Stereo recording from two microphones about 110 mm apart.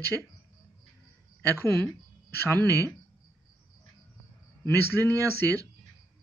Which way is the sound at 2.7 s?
30° right (ahead or behind).